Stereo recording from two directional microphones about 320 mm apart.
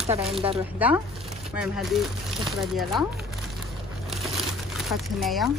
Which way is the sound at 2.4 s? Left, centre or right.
Centre.